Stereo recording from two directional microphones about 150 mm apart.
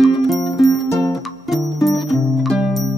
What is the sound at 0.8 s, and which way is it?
Music, 20° left (ahead or behind).